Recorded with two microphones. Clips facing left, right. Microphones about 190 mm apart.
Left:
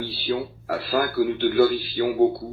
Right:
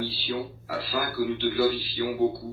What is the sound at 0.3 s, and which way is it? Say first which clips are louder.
A man's voice: left 6 dB; 55° left (ahead or behind).